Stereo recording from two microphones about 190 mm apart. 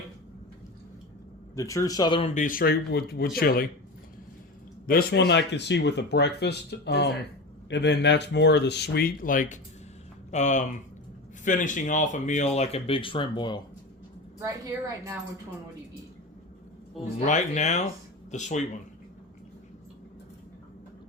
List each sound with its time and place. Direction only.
1.5 s speech: 15° left (ahead or behind)
2.3 s speech: 45° left (ahead or behind)
4.9 s speech: 60° left (ahead or behind); by 13.6 s 25° left (ahead or behind)
17.2 s speech: 40° left (ahead or behind)